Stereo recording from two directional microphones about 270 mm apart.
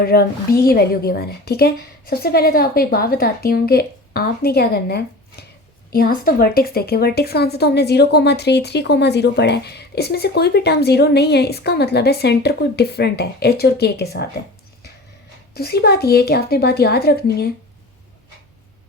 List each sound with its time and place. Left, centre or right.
0.0 s a woman's voice: left
15.5 s a woman's voice: left